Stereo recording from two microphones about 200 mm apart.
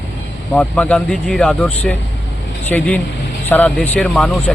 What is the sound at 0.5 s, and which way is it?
Speech, 5° left (ahead or behind).